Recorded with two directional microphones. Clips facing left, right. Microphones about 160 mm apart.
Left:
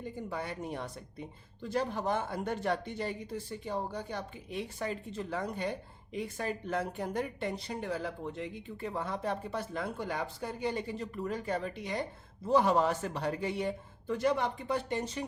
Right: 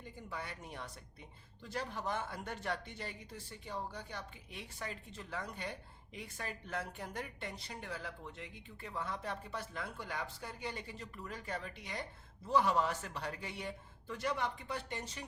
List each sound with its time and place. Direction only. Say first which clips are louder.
0.3 s a man's voice: left 6 dB; 30° left (ahead or behind)